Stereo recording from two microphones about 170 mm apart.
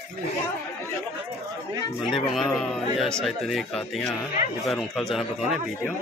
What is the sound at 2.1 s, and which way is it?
Speech, centre (ahead or behind).